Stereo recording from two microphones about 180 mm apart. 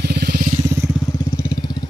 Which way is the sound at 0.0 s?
60° right (ahead or behind).